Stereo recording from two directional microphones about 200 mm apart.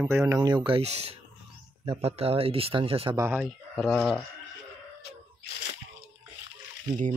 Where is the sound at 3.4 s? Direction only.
Centre (ahead or behind).